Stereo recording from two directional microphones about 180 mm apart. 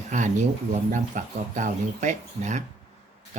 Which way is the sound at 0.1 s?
40° right (ahead or behind).